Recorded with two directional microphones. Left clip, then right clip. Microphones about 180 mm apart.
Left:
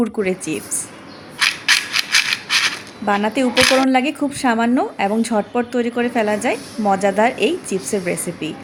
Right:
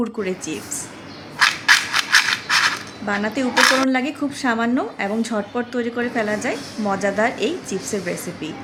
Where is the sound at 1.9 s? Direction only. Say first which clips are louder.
Even; 10° left (ahead or behind).